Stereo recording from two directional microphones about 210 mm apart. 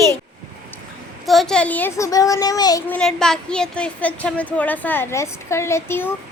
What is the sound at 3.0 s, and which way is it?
Speech, 5° left (ahead or behind).